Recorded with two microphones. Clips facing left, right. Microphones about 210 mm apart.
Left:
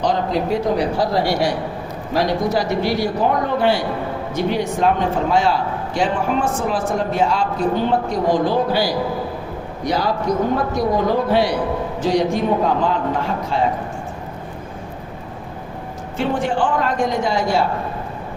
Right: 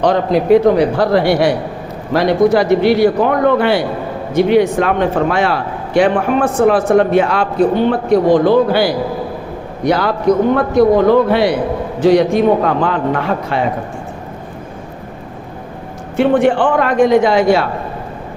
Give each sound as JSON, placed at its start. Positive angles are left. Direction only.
{"t": 0.0, "sound": "a man's voice", "side_deg": -60}
{"t": 16.1, "sound": "a man's voice", "side_deg": -65}